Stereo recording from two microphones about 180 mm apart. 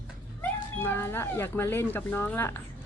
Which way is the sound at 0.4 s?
10° left (ahead or behind).